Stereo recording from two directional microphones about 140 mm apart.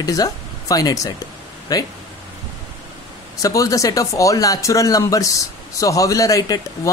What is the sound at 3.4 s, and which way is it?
Speech, 25° left (ahead or behind).